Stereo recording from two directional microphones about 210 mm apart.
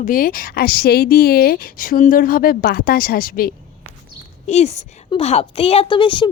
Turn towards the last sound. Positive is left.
turn(degrees=25)  # may be behind; listen again after turning